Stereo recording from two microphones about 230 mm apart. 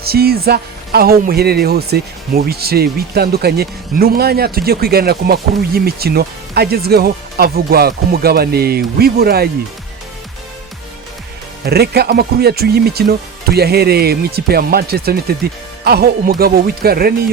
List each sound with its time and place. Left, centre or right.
0.0 s speech: right
11.6 s speech: right